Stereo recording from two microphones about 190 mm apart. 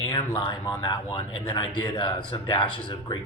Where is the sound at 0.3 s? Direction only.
25° left (ahead or behind).